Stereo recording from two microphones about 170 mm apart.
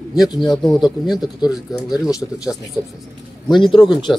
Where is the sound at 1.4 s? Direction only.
25° left (ahead or behind).